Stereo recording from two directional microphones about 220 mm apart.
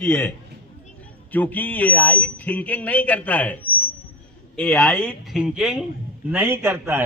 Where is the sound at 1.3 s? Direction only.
5° left (ahead or behind).